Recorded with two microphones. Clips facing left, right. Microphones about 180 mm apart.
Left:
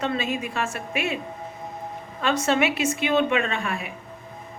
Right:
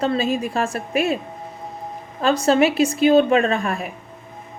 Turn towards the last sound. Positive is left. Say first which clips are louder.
# right 6 dB
turn(degrees=-40)  # may be behind; listen again after turning